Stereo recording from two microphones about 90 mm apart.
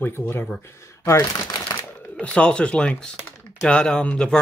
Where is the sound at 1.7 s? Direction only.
25° left (ahead or behind).